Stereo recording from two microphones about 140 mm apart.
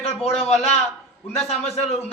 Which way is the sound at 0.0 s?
45° left (ahead or behind).